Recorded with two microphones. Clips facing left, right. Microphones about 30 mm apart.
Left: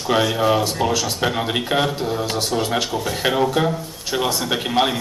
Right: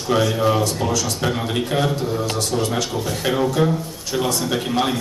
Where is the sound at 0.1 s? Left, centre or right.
Centre.